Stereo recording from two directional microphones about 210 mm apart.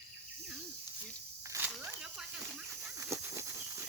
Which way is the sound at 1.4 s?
15° right (ahead or behind).